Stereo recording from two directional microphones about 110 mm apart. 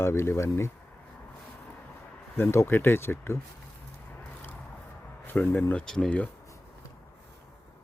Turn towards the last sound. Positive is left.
turn(degrees=10)  # may be behind; listen again after turning